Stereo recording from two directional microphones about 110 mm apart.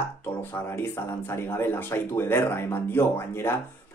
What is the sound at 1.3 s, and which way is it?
A man's voice, 20° left (ahead or behind).